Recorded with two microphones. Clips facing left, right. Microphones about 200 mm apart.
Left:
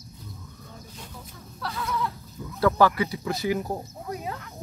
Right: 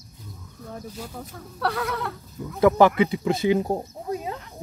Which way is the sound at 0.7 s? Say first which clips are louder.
Right 10 dB; 65° right (ahead or behind).